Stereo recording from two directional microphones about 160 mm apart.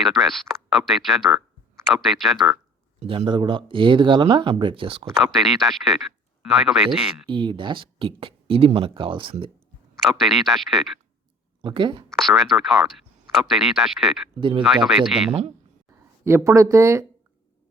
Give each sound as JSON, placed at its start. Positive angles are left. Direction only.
{"t": 0.0, "sound": "speech", "side_deg": 0}
{"t": 3.0, "sound": "speech", "side_deg": -35}
{"t": 5.2, "sound": "speech", "side_deg": 0}
{"t": 7.3, "sound": "speech", "side_deg": -30}
{"t": 10.0, "sound": "speech", "side_deg": 0}
{"t": 11.6, "sound": "speech", "side_deg": -30}
{"t": 12.0, "sound": "speech", "side_deg": 0}
{"t": 16.2, "sound": "speech", "side_deg": -15}